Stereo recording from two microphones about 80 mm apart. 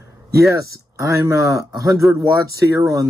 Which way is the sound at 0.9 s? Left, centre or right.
Right.